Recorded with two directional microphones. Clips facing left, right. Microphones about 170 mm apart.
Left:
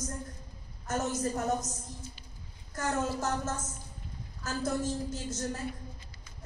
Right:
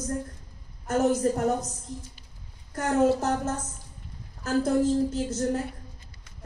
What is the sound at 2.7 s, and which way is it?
Speech, 60° right (ahead or behind).